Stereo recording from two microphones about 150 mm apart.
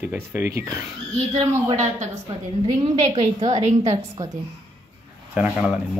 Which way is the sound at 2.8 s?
45° right (ahead or behind).